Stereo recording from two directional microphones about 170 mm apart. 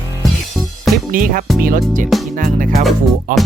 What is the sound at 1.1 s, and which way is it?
Music, 55° right (ahead or behind).